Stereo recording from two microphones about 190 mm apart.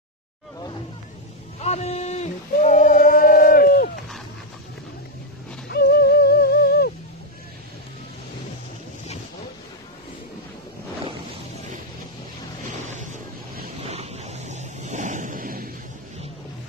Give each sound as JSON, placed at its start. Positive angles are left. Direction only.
{"t": 1.6, "sound": "a sound", "side_deg": 35}
{"t": 5.7, "sound": "music", "side_deg": 55}
{"t": 12.6, "sound": "waves", "side_deg": -40}